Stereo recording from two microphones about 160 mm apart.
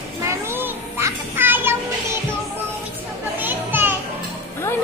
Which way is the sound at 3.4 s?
10° right (ahead or behind).